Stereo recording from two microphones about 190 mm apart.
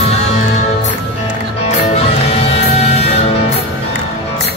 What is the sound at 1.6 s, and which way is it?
Music, 35° left (ahead or behind).